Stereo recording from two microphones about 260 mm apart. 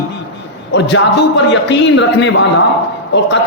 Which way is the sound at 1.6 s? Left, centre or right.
Left.